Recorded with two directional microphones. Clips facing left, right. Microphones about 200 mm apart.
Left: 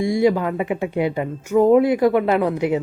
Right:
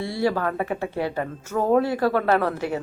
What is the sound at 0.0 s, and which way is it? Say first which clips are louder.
Speech: left 6 dB; 15° left (ahead or behind).